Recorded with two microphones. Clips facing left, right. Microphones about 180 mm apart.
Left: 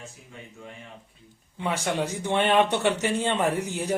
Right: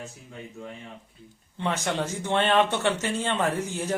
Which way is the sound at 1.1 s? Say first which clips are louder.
Right 2 dB; 10° left (ahead or behind).